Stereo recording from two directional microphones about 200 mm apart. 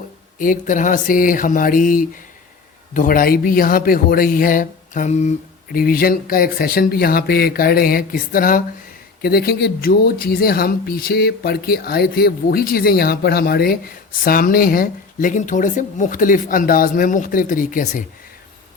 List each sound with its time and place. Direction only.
0.3 s speech: 40° left (ahead or behind)
5.7 s speech: 50° left (ahead or behind)